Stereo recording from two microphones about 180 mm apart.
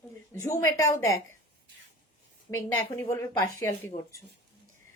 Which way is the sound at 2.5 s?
15° left (ahead or behind).